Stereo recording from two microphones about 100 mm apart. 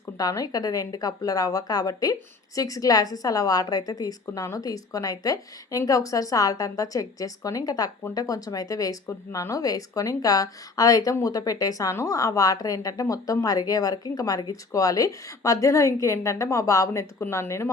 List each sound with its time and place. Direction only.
0.2 s a woman's voice: 40° left (ahead or behind)